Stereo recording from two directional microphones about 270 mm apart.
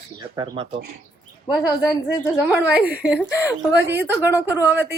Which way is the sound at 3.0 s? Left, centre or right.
Centre.